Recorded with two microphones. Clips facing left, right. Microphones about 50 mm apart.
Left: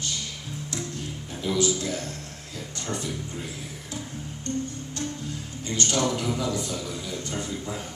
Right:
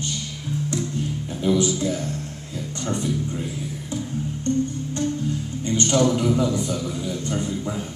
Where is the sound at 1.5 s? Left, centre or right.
Right.